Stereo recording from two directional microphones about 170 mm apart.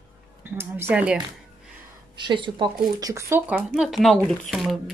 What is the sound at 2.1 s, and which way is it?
Speech, 30° right (ahead or behind).